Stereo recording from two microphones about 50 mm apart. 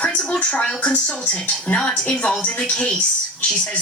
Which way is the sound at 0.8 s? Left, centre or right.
Left.